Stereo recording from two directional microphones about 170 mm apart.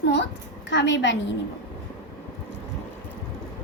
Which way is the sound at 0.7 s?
90° left.